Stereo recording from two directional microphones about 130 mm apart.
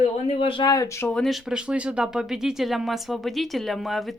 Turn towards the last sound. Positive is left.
turn(degrees=0)  # may be behind; listen again after turning